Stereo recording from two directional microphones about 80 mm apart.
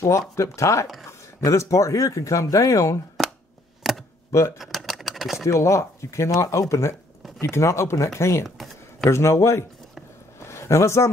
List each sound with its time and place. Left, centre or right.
0.4 s speech: left
3.8 s computer keyboard: centre
4.6 s a sound: centre
5.5 s speech: left
8.5 s a sound: centre
9.1 s speech: left